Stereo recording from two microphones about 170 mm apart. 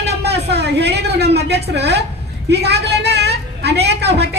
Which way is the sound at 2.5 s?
80° right.